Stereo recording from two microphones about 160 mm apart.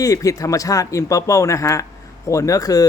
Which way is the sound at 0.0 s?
20° left (ahead or behind).